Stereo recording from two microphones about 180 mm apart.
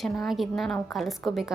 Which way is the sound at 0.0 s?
Centre (ahead or behind).